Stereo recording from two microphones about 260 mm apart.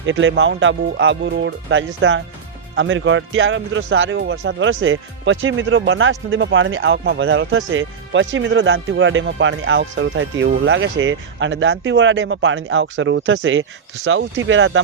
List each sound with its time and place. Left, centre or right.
0.0 s speech: right